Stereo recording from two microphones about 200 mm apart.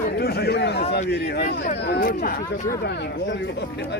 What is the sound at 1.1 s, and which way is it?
Speech, 55° left (ahead or behind).